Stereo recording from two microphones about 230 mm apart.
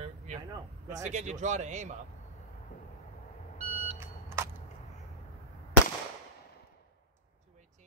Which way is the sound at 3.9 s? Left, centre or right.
Centre.